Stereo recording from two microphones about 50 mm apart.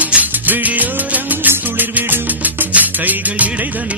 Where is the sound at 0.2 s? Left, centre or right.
Right.